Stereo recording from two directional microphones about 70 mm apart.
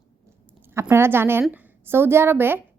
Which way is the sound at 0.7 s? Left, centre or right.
Right.